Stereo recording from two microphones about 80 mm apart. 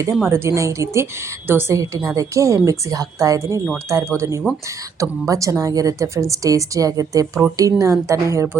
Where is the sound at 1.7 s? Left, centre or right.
Right.